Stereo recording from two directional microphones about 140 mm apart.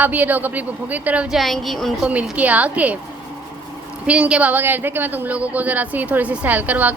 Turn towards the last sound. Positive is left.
turn(degrees=-10)  # may be behind; listen again after turning